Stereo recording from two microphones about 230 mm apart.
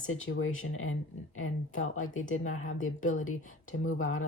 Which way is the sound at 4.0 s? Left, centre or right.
Left.